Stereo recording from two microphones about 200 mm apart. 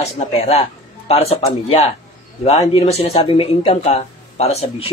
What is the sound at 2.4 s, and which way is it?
A man's voice, 30° left (ahead or behind).